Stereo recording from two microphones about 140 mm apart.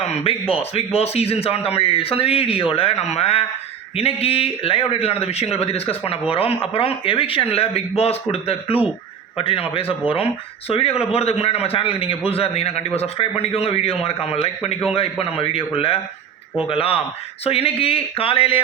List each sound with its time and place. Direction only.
0.0 s a man's voice: 45° left (ahead or behind)